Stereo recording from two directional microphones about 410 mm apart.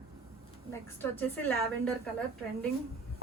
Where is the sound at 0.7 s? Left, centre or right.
Centre.